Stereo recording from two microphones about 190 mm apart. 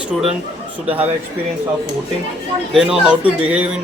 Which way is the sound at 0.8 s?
10° right (ahead or behind).